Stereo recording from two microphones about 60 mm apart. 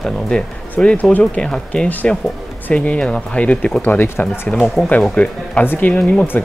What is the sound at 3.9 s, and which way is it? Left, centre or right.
Speech, left.